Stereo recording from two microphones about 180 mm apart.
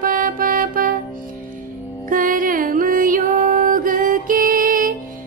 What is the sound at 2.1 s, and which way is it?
Music, 50° right (ahead or behind).